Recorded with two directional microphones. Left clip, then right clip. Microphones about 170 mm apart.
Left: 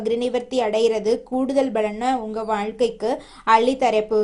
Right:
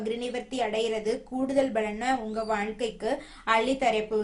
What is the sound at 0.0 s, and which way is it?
Speech, 35° left (ahead or behind).